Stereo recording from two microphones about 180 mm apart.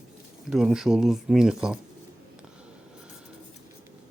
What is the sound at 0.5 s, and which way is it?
Speech, 5° right (ahead or behind).